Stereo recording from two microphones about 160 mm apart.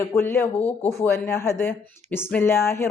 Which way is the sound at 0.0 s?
15° left (ahead or behind).